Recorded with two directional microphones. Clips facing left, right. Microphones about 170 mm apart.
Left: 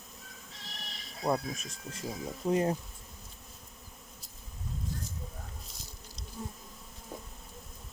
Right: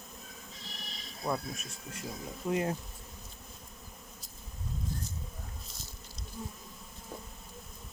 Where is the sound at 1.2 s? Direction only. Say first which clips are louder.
Left 4 dB; 40° left (ahead or behind).